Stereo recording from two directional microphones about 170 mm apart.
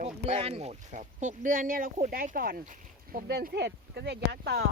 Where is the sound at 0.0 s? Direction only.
35° right (ahead or behind).